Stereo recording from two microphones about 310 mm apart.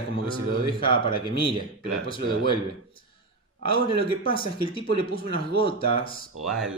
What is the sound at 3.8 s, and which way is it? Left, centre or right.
A man's voice, centre.